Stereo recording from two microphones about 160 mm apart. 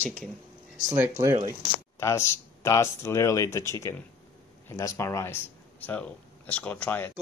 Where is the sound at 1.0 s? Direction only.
20° right (ahead or behind).